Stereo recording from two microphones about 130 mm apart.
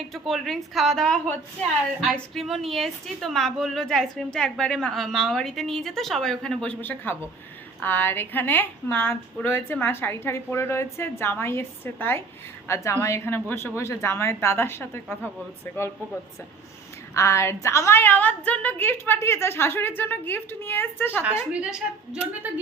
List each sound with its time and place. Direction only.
0.1 s a woman's voice: centre (ahead or behind); by 15.3 s 15° left (ahead or behind)
17.2 s a woman's voice: 20° left (ahead or behind)
21.5 s a woman's voice: 5° right (ahead or behind)